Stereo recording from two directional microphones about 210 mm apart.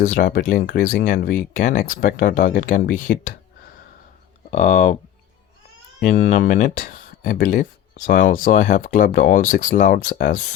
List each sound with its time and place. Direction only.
0.0 s speech: 40° left (ahead or behind)
6.0 s speech: 40° left (ahead or behind)